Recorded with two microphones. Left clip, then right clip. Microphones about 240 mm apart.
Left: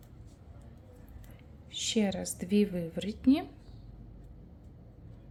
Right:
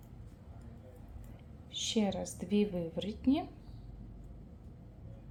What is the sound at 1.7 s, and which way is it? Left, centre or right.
A woman's voice, centre.